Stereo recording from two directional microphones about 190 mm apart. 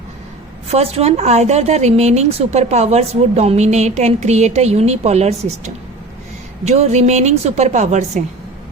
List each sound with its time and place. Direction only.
0.7 s a woman's voice: 30° right (ahead or behind)